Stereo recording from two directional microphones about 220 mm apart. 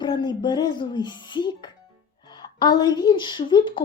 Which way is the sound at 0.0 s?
20° left (ahead or behind).